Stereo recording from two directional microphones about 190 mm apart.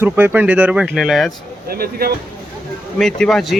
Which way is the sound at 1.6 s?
55° right (ahead or behind).